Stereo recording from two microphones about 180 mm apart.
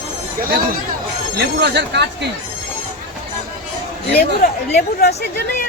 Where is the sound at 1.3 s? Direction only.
70° right (ahead or behind).